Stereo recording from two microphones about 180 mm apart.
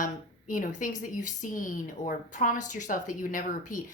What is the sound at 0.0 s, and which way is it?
A woman's voice, 45° left (ahead or behind).